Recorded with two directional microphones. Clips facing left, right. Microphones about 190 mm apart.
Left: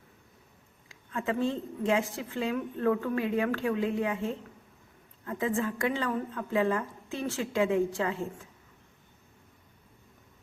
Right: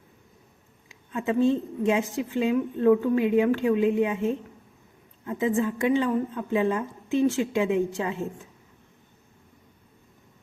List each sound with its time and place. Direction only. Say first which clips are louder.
0.9 s a woman's voice: right 4 dB; 20° right (ahead or behind)